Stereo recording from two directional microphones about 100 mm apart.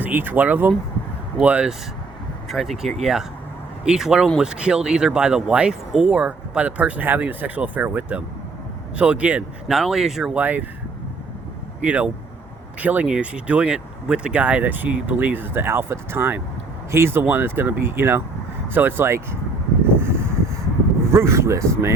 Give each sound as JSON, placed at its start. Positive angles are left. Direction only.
{"t": 0.0, "sound": "speech", "side_deg": -20}
{"t": 2.5, "sound": "speech", "side_deg": 0}
{"t": 9.7, "sound": "speech", "side_deg": -5}
{"t": 10.4, "sound": "speech", "side_deg": -15}
{"t": 11.8, "sound": "speech", "side_deg": -15}
{"t": 20.0, "sound": "a sound", "side_deg": -25}
{"t": 21.1, "sound": "speech", "side_deg": -25}